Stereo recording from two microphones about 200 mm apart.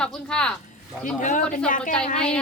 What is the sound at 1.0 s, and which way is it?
Speech, 40° left (ahead or behind).